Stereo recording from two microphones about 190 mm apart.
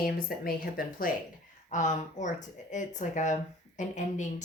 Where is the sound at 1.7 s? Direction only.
40° left (ahead or behind).